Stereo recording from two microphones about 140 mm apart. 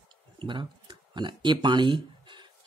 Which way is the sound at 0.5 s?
35° right (ahead or behind).